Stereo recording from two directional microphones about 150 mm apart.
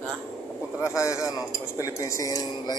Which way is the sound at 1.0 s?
20° left (ahead or behind).